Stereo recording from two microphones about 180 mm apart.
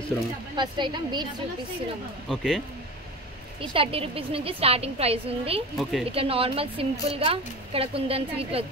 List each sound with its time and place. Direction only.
0.6 s a woman's voice: 25° right (ahead or behind)
2.2 s speech: centre (ahead or behind)
3.7 s a woman's voice: 30° right (ahead or behind)
5.8 s speech: centre (ahead or behind)
6.1 s a woman's voice: 30° right (ahead or behind)